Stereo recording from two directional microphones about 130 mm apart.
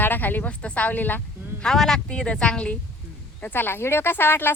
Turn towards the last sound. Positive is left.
turn(degrees=15)  # may be behind; listen again after turning